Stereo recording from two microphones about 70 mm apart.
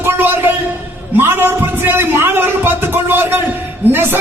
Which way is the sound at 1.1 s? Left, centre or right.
Right.